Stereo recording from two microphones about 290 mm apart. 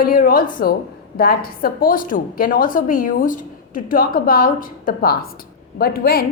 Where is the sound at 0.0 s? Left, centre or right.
Left.